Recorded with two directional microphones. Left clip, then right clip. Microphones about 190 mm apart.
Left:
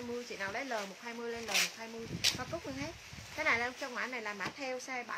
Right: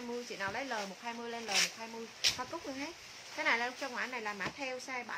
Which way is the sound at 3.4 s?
5° right (ahead or behind).